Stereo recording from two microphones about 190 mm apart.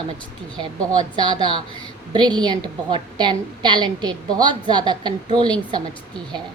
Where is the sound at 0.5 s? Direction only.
5° left (ahead or behind).